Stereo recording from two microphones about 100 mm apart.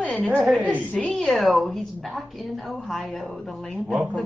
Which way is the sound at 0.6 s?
15° right (ahead or behind).